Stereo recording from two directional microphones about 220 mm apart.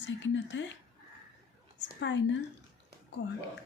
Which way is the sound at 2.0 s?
55° left (ahead or behind).